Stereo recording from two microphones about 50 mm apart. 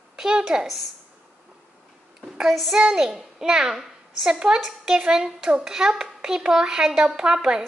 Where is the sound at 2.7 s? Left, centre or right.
Centre.